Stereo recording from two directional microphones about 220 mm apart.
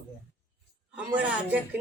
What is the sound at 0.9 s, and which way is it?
Speech, 5° right (ahead or behind).